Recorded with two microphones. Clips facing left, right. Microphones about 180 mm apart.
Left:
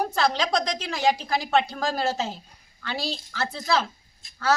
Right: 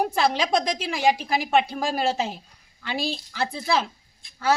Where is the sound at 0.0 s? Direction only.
10° right (ahead or behind).